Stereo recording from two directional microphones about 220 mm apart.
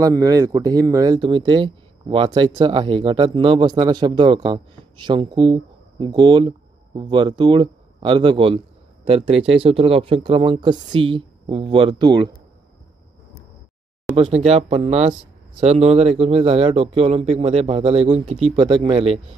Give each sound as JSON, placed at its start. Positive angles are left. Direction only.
{"t": 0.0, "sound": "speech", "side_deg": -15}
{"t": 14.0, "sound": "speech", "side_deg": -25}